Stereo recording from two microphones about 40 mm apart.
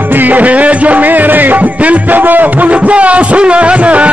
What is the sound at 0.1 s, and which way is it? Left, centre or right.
Music, right.